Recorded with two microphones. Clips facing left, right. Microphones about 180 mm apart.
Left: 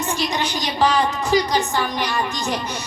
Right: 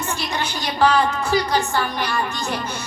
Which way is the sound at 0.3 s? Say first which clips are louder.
Right 2 dB; 15° left (ahead or behind).